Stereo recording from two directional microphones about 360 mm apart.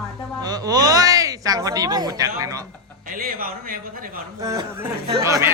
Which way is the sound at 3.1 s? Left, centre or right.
Right.